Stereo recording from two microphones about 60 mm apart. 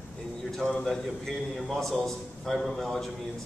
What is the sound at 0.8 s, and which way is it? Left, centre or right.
A man's voice, centre.